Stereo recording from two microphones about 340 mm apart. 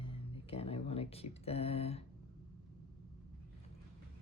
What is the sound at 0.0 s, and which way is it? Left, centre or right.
Speech, centre.